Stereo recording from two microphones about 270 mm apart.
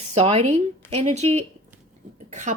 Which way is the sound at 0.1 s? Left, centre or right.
Right.